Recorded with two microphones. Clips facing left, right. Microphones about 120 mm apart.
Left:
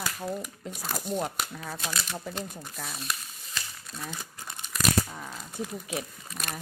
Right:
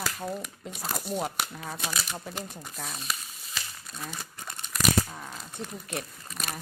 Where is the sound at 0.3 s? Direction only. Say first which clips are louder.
Left 1 dB; centre (ahead or behind).